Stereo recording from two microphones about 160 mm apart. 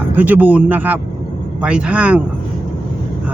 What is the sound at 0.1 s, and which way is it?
Speech, 10° right (ahead or behind).